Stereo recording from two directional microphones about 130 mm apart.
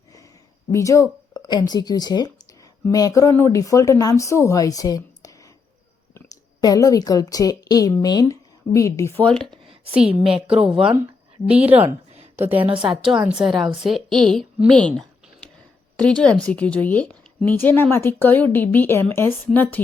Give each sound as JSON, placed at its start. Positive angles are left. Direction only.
{"t": 0.7, "sound": "speech", "side_deg": 25}
{"t": 6.6, "sound": "speech", "side_deg": 25}
{"t": 9.2, "sound": "a woman's voice", "side_deg": 5}
{"t": 9.9, "sound": "a woman's voice", "side_deg": -5}
{"t": 10.4, "sound": "speech", "side_deg": -45}
{"t": 10.7, "sound": "a woman's voice", "side_deg": -5}
{"t": 12.1, "sound": "a sound", "side_deg": -55}
{"t": 12.7, "sound": "a woman's voice", "side_deg": -5}
{"t": 14.7, "sound": "a sound", "side_deg": 5}
{"t": 16.0, "sound": "a woman's voice", "side_deg": 10}